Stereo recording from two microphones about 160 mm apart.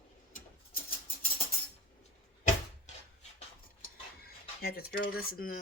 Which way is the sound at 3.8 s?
70° left (ahead or behind).